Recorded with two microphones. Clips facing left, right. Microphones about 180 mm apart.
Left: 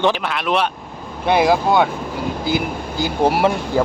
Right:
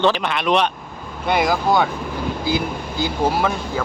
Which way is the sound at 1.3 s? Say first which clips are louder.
Left 4 dB; 30° left (ahead or behind).